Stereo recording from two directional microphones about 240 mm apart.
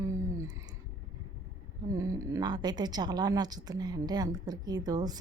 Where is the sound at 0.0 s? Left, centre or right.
Centre.